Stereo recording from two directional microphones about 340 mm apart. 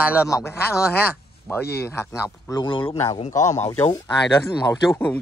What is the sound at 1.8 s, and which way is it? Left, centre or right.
Speech, centre.